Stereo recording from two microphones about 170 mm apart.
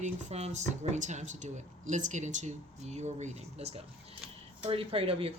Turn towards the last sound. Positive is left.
turn(degrees=-35)  # may be behind; listen again after turning